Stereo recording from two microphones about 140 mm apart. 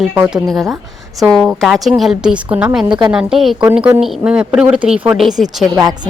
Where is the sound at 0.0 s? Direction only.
10° right (ahead or behind).